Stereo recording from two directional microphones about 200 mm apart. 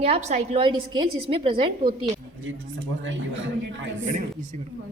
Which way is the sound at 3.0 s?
70° right (ahead or behind).